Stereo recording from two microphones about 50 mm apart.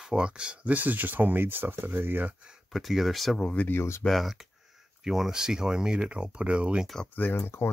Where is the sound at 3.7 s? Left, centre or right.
Left.